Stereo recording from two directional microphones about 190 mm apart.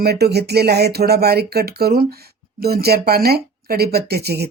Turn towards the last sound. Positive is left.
turn(degrees=-55)  # may be behind; listen again after turning